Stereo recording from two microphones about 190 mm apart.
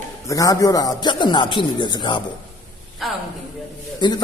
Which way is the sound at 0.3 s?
20° left (ahead or behind).